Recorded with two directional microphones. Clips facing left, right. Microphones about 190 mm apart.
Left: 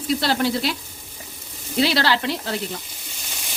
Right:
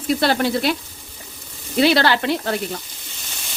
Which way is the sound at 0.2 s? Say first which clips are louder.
Right 3 dB; 55° right (ahead or behind).